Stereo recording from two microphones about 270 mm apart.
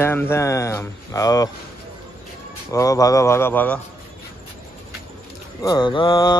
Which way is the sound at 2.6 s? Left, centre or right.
Centre.